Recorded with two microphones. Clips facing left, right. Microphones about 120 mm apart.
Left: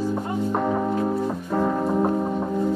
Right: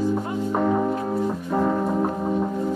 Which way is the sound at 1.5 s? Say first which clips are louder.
Even; 5° right (ahead or behind).